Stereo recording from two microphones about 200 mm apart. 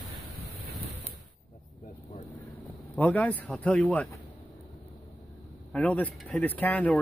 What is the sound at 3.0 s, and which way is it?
Speech, 10° left (ahead or behind).